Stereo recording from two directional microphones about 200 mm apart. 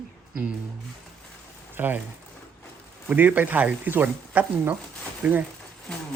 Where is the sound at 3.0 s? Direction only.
10° right (ahead or behind).